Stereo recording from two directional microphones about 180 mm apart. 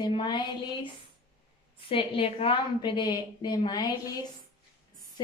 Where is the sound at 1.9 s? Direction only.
30° left (ahead or behind).